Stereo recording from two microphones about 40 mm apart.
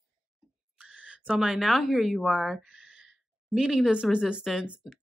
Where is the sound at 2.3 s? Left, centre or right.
Right.